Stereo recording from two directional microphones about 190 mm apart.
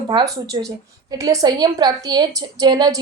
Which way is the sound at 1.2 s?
20° right (ahead or behind).